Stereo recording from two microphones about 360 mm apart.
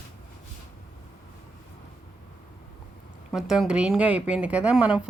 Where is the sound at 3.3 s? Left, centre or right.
Centre.